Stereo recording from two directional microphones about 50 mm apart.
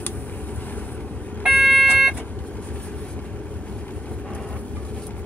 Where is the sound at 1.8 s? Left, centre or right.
Centre.